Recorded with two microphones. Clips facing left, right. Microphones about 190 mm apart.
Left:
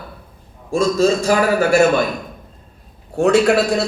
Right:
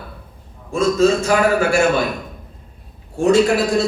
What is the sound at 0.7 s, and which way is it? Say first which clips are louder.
Speech: even; 35° left (ahead or behind).